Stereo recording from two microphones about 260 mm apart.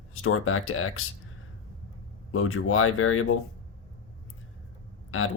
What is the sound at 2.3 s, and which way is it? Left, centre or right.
Speech, left.